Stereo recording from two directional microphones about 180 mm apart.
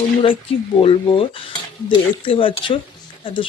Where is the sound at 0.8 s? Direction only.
30° left (ahead or behind).